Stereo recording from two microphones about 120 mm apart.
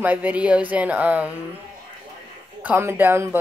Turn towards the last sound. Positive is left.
turn(degrees=-20)  # may be behind; listen again after turning